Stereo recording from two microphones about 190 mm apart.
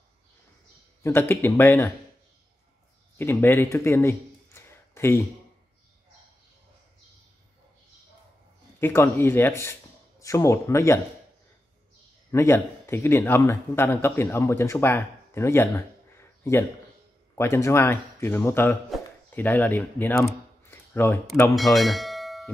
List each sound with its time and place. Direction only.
1.0 s speech: 10° left (ahead or behind)
3.2 s speech: 10° left (ahead or behind)
8.7 s speech: 15° left (ahead or behind)
12.3 s speech: 15° left (ahead or behind)
20.7 s a sound: 15° left (ahead or behind)
21.5 s bell: centre (ahead or behind)